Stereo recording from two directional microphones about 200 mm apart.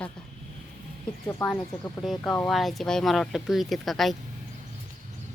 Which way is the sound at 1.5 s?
Centre (ahead or behind).